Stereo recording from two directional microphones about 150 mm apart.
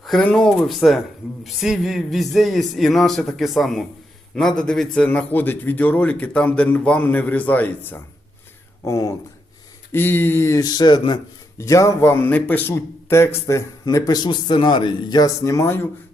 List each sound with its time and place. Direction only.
0.0 s a man's voice: 5° left (ahead or behind)